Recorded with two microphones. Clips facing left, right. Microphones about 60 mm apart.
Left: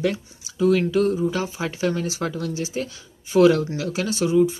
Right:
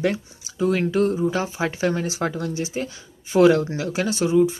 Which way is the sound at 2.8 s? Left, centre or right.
Centre.